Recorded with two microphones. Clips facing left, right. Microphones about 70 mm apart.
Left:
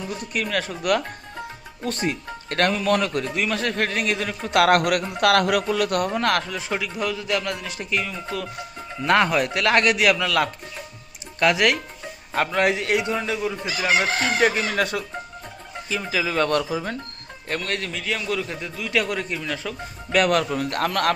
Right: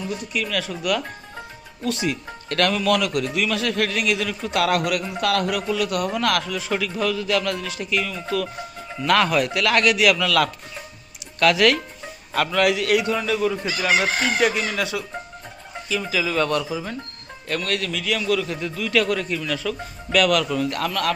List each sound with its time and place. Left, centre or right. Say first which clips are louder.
0.3 s speech: left 2 dB; left
4.5 s a man's voice: left 4 dB; left
5.2 s a man's voice: left 5 dB; left
5.6 s speech: left 1 dB; left
6.1 s a man's voice: even; left
13.5 s fowl: right 1 dB; centre
14.0 s speech: even; left
15.9 s speech: right 1 dB; left
17.5 s a man's voice: right 2 dB; left
20.1 s speech: right 1 dB; left
20.6 s speech: left 1 dB; left